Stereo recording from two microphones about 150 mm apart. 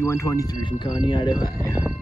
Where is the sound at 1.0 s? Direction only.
30° left (ahead or behind).